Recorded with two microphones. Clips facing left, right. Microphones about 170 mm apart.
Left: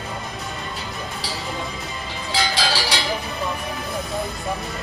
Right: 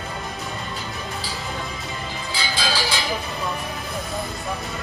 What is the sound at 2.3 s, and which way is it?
Cowbell, 80° left.